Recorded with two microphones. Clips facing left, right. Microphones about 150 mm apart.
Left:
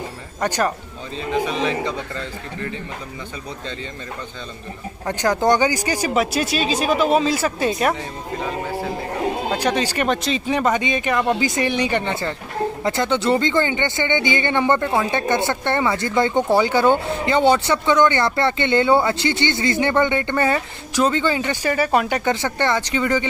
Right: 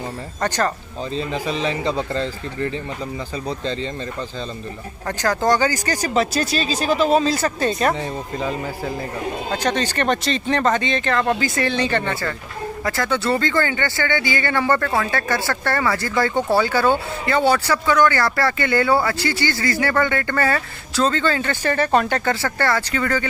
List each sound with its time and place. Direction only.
1.1 s a man's voice: 35° right (ahead or behind)
5.0 s speech: 15° left (ahead or behind)
9.6 s speech: 5° left (ahead or behind)